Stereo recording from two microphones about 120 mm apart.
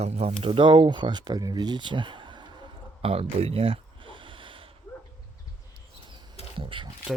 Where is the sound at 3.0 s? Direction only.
55° right (ahead or behind).